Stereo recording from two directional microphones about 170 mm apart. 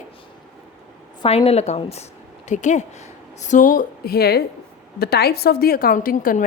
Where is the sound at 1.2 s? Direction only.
35° left (ahead or behind).